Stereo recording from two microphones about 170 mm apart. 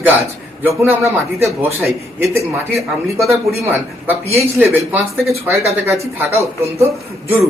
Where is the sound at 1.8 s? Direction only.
Centre (ahead or behind).